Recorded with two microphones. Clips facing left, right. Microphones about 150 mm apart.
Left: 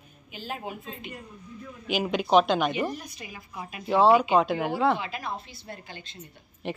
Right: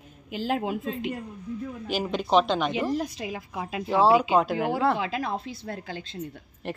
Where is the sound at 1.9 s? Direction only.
5° left (ahead or behind).